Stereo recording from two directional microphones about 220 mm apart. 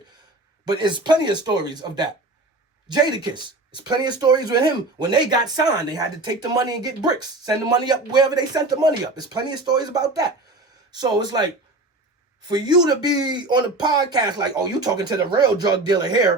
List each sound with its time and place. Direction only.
0.7 s speech: 20° right (ahead or behind)
12.5 s speech: 20° right (ahead or behind)